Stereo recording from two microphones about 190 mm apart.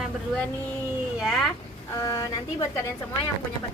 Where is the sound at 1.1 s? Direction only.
Centre (ahead or behind).